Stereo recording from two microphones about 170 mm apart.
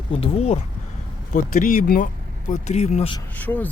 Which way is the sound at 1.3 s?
50° left (ahead or behind).